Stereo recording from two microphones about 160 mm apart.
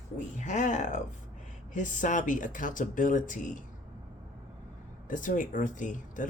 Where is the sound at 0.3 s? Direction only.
50° left (ahead or behind).